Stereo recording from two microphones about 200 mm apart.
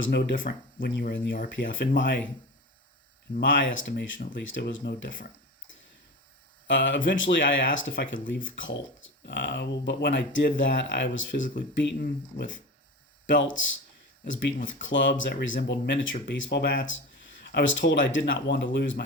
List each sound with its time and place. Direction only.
0.2 s speech: 45° left (ahead or behind); by 2.2 s 60° left (ahead or behind)
3.4 s speech: 65° left (ahead or behind)
4.2 s speech: 45° left (ahead or behind)
4.4 s speech: 70° left (ahead or behind); by 5.3 s 45° left (ahead or behind)
6.7 s speech: 65° left (ahead or behind)
11.8 s speech: 55° left (ahead or behind)
13.2 s speech: 65° left (ahead or behind)